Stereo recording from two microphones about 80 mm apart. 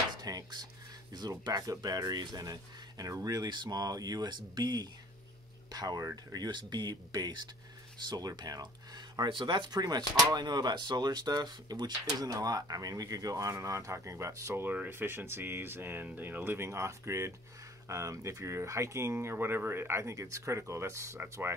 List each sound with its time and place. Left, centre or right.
0.1 s dishes: right
1.4 s speech: right
3.4 s speech: right
3.8 s speech: right
5.7 s speech: right
14.7 s speech: right